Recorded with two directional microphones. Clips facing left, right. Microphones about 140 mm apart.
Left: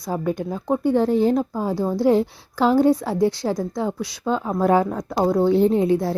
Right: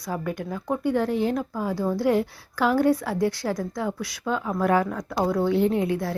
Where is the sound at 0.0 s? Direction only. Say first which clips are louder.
Left 5 dB; 25° left (ahead or behind).